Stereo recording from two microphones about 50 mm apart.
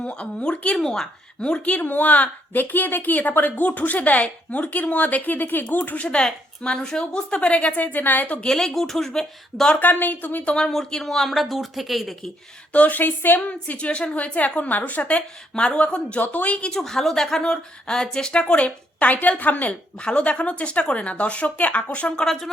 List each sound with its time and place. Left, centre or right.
0.0 s a woman's voice: left
0.8 s speech: centre
1.6 s a woman's voice: left
6.1 s a woman's voice: centre; by 8.4 s left
8.4 s speech: centre
9.8 s a woman's voice: left
10.4 s a woman's voice: left
10.7 s speech: centre
12.7 s a woman's voice: left
16.7 s a woman's voice: centre; by 22.1 s left
22.1 s speech: centre